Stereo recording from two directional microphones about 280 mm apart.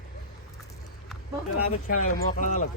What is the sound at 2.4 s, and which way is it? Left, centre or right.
Speech, left.